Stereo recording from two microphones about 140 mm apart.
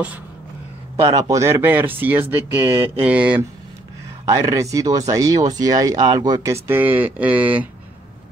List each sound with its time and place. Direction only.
1.0 s speech: 25° right (ahead or behind)
4.3 s speech: 25° right (ahead or behind)